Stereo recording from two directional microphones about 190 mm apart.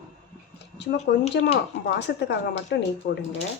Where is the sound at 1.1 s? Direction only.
60° left (ahead or behind).